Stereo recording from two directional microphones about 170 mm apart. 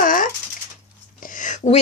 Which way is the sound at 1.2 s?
50° left (ahead or behind).